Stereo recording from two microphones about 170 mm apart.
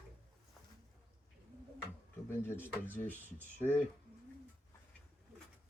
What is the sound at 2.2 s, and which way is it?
Speech, 15° left (ahead or behind).